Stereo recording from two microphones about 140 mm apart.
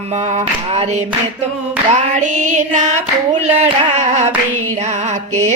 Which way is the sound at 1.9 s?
60° right (ahead or behind).